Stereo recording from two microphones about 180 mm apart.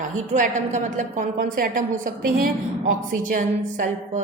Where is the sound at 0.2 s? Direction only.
45° right (ahead or behind).